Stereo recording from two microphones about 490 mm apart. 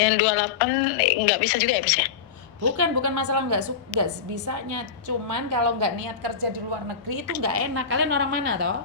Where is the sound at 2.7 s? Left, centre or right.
Right.